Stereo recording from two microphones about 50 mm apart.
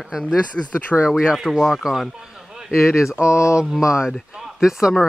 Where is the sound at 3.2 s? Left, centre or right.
Left.